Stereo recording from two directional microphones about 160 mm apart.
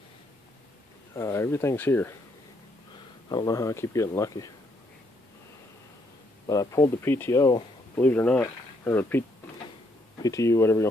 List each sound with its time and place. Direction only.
1.1 s speech: 20° left (ahead or behind)
3.3 s speech: 25° left (ahead or behind)
6.4 s speech: 20° left (ahead or behind)
10.2 s speech: 20° left (ahead or behind)